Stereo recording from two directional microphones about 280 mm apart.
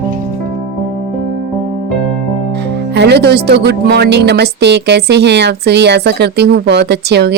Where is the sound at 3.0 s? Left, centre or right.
Right.